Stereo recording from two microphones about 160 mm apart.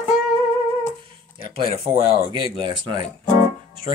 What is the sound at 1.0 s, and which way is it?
Speech, 35° right (ahead or behind).